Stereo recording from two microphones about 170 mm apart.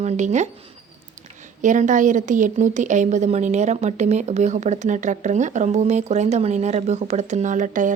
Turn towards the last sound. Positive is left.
turn(degrees=-50)  # may be behind; listen again after turning